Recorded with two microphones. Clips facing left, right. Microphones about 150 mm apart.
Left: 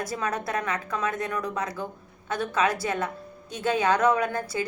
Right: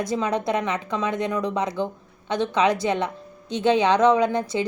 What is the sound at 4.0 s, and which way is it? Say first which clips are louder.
Speech: right 5 dB; 20° right (ahead or behind).